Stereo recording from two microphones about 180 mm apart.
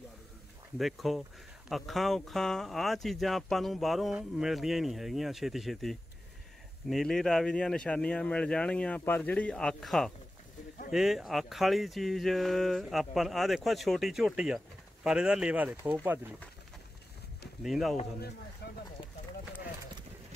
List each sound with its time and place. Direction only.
0.7 s speech: centre (ahead or behind)
17.6 s speech: centre (ahead or behind)
18.6 s a sound: 65° left (ahead or behind)